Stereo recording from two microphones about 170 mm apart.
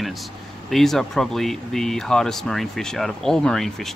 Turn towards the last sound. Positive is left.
turn(degrees=0)  # may be behind; listen again after turning